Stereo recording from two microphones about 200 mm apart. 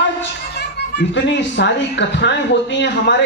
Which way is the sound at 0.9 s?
60° left (ahead or behind).